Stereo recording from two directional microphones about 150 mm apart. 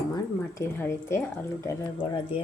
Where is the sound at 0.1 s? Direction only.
20° left (ahead or behind).